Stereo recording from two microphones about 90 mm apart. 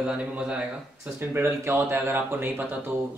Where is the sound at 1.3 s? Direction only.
25° right (ahead or behind).